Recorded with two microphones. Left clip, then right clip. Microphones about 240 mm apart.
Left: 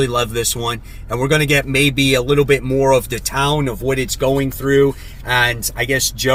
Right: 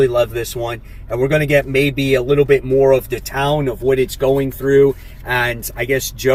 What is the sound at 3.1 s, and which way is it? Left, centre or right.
Speech, centre.